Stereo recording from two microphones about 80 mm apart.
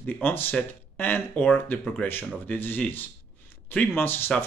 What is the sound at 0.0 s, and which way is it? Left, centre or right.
Speech, left.